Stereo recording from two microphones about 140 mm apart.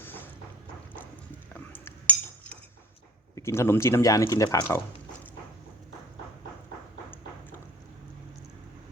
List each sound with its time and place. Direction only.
0.0 s boat: 15° left (ahead or behind)
1.5 s cutlery: 10° left (ahead or behind)
3.3 s speech: 20° left (ahead or behind)